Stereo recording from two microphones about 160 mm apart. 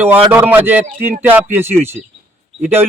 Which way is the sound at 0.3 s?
15° right (ahead or behind).